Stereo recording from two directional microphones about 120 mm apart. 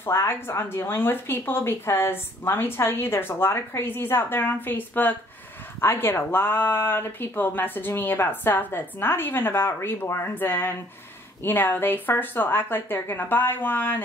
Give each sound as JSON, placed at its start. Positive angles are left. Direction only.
{"t": 0.0, "sound": "speech", "side_deg": 20}